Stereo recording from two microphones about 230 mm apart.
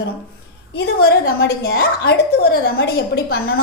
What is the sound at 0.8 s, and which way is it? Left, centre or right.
A woman's voice, left.